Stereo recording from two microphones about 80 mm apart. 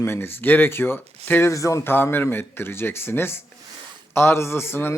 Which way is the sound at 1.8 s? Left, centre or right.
Left.